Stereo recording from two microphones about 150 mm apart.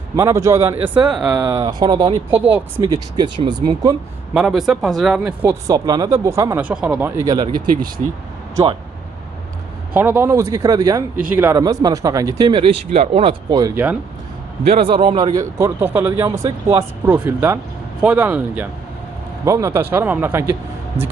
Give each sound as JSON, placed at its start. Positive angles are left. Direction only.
{"t": 0.2, "sound": "a man's voice", "side_deg": -20}
{"t": 1.6, "sound": "a man's voice", "side_deg": -30}
{"t": 2.3, "sound": "a man's voice", "side_deg": -10}
{"t": 2.8, "sound": "a man's voice", "side_deg": -25}
{"t": 4.4, "sound": "speech", "side_deg": -5}
{"t": 5.6, "sound": "a man's voice", "side_deg": -25}
{"t": 6.6, "sound": "a man's voice", "side_deg": -10}
{"t": 7.4, "sound": "speech", "side_deg": -30}
{"t": 9.9, "sound": "a man's voice", "side_deg": -15}
{"t": 11.3, "sound": "a man's voice", "side_deg": -10}
{"t": 11.5, "sound": "a man's voice", "side_deg": -25}
{"t": 12.5, "sound": "speech", "side_deg": -35}
{"t": 13.5, "sound": "a man's voice", "side_deg": -25}
{"t": 14.7, "sound": "a man's voice", "side_deg": -40}